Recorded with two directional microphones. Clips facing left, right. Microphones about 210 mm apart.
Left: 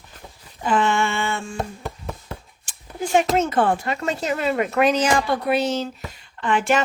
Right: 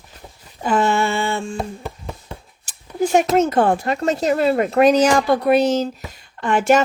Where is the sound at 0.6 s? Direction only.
40° right (ahead or behind).